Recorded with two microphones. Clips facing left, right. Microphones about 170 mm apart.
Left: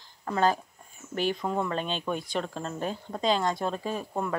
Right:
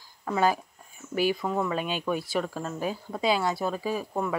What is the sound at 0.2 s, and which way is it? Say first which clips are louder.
Speech: right 1 dB; 10° right (ahead or behind).